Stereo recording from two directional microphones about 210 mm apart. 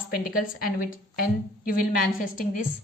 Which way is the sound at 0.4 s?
40° left (ahead or behind).